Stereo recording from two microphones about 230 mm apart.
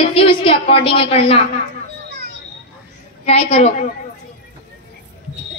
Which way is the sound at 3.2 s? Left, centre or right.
Left.